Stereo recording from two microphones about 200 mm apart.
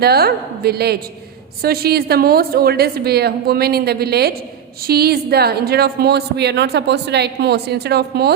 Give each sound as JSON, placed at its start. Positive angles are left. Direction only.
{"t": 0.0, "sound": "a woman's voice", "side_deg": -50}